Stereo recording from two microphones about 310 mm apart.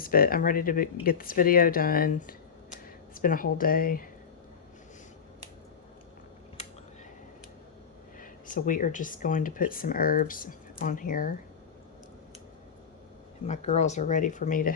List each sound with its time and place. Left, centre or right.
0.0 s speech: left
8.2 s speech: left
13.5 s speech: left